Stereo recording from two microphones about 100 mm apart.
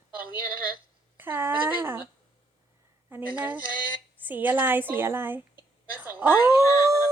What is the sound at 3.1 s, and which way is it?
A woman's voice, 20° right (ahead or behind).